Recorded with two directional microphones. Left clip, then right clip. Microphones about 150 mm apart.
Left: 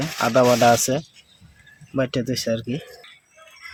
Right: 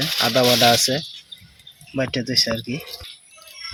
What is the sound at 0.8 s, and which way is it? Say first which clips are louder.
Speech: right 2 dB; 15° left (ahead or behind).